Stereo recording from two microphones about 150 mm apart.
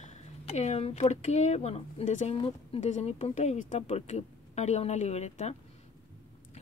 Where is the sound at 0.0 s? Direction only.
50° left (ahead or behind).